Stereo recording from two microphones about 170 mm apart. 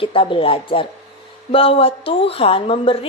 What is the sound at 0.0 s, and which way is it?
A woman's voice, 30° left (ahead or behind).